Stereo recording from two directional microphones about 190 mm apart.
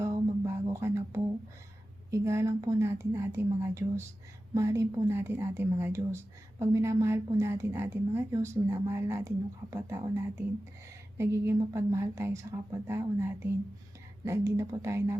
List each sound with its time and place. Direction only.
0.0 s music: 15° right (ahead or behind)
2.0 s speech: 15° right (ahead or behind)